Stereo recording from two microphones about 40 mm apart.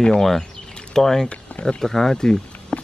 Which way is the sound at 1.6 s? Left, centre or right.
Centre.